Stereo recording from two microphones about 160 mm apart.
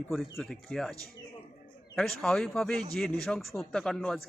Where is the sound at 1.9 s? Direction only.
5° left (ahead or behind).